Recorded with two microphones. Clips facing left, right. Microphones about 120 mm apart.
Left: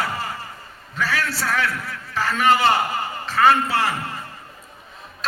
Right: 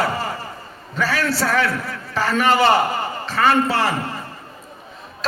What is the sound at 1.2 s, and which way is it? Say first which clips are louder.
Speech: right 6 dB; 80° right.